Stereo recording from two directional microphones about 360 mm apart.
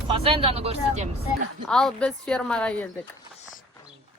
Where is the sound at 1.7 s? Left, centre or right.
Centre.